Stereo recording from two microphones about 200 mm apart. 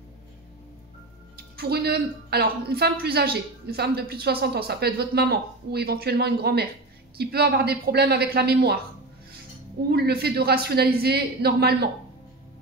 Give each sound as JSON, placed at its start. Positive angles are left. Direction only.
{"t": 1.3, "sound": "a woman's voice", "side_deg": -50}
{"t": 9.8, "sound": "a woman's voice", "side_deg": -50}